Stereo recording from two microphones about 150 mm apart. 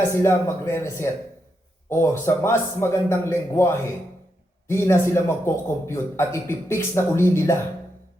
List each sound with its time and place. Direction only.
0.1 s a man's voice: 15° left (ahead or behind)